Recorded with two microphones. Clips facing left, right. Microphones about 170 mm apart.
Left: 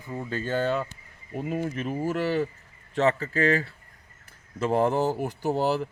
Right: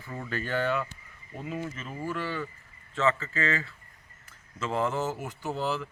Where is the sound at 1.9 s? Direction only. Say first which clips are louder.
Left 7 dB; 40° left (ahead or behind).